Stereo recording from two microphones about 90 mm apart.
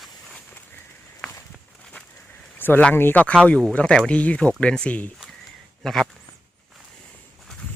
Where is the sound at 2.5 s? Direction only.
20° left (ahead or behind).